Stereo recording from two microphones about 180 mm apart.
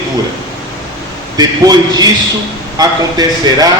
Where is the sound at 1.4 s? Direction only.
20° right (ahead or behind).